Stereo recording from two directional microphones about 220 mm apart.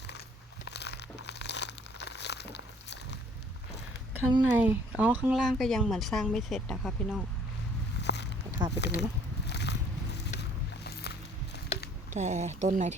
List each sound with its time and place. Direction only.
0.7 s crumpling: 50° left (ahead or behind)
4.1 s speech: 20° right (ahead or behind)
4.6 s speech: 5° right (ahead or behind)
8.0 s a sound: 50° left (ahead or behind)
8.7 s speech: 50° left (ahead or behind)
9.5 s a sound: 50° left (ahead or behind)
10.2 s boat: 50° left (ahead or behind)
10.8 s walk: 50° left (ahead or behind)
12.1 s speech: 30° right (ahead or behind)